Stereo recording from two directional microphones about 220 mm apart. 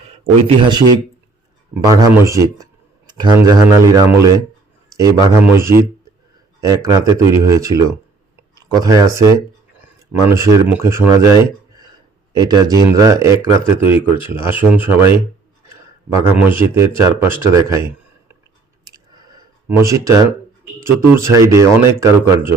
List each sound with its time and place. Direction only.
0.4 s speech: 20° right (ahead or behind)
1.9 s speech: 15° right (ahead or behind)
15.6 s a sound: 10° right (ahead or behind)
16.6 s speech: 10° right (ahead or behind)
18.9 s a sound: 15° right (ahead or behind)
21.0 s speech: 10° right (ahead or behind)